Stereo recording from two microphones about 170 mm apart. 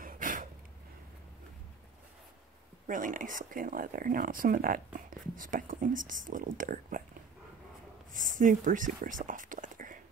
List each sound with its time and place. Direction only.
0.0 s a sound: 50° right (ahead or behind)
2.9 s speech: 50° right (ahead or behind)
8.1 s speech: 50° right (ahead or behind)